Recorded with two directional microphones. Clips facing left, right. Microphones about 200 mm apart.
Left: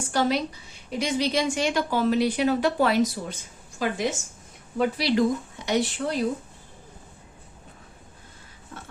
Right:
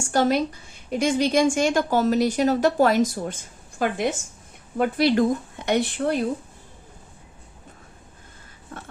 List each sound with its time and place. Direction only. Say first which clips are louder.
0.0 s a woman's voice: right 3 dB; 45° right (ahead or behind)